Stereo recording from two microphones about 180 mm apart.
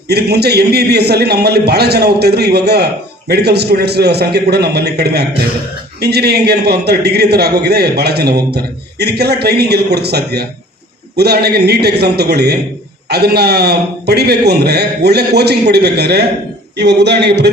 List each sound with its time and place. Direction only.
0.1 s a man's voice: 65° right (ahead or behind)